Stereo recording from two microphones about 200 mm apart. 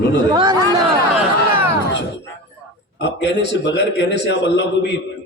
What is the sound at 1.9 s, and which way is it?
Music, 60° left (ahead or behind).